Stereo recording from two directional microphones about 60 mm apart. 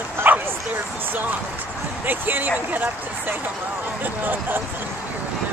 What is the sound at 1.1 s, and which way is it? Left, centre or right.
Speech, right.